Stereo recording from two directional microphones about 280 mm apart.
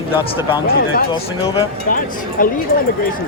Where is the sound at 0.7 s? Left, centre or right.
Left.